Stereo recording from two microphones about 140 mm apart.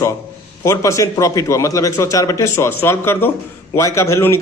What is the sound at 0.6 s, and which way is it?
A man's voice, 20° left (ahead or behind).